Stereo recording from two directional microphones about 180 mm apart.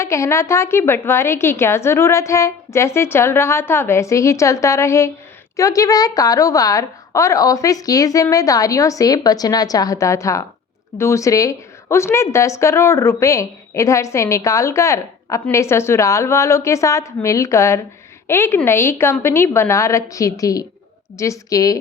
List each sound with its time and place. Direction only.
0.0 s a woman's voice: 15° left (ahead or behind)